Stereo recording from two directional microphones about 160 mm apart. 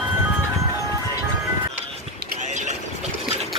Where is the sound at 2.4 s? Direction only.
50° right (ahead or behind).